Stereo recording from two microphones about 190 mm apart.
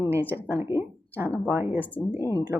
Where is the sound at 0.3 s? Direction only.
15° right (ahead or behind).